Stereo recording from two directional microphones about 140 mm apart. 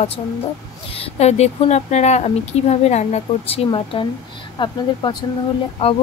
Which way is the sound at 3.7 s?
35° left (ahead or behind).